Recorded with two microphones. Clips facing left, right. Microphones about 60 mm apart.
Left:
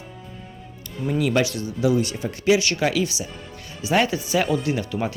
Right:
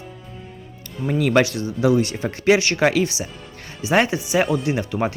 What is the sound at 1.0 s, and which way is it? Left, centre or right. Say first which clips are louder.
Speech: right 3 dB; right.